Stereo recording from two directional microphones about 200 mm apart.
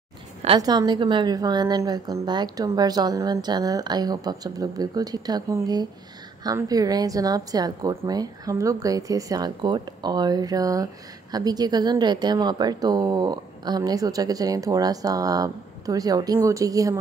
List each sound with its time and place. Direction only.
0.6 s a woman's voice: 20° right (ahead or behind)